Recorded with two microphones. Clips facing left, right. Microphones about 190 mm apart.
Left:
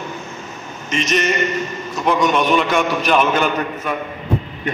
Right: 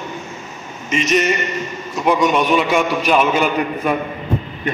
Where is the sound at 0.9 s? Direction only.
5° right (ahead or behind).